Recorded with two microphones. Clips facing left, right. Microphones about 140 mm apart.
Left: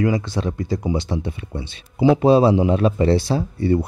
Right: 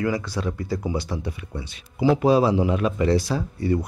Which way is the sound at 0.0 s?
25° left (ahead or behind).